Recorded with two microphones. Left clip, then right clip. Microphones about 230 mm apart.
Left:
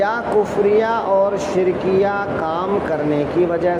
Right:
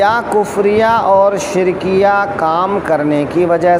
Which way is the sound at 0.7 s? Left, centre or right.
Right.